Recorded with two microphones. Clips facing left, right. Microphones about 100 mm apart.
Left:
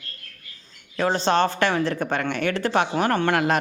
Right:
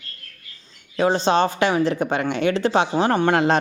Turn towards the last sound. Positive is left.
turn(degrees=-25)  # may be behind; listen again after turning